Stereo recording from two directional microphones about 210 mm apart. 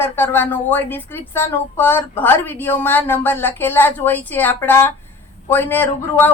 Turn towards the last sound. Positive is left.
turn(degrees=10)  # may be behind; listen again after turning